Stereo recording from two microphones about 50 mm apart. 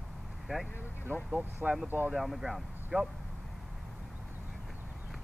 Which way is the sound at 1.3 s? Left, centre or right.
Right.